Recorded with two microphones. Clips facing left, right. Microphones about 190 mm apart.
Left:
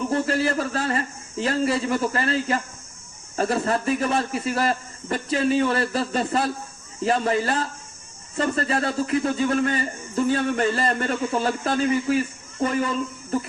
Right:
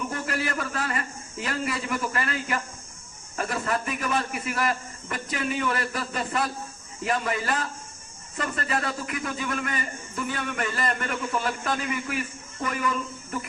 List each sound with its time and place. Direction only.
0.1 s a man's voice: 30° left (ahead or behind)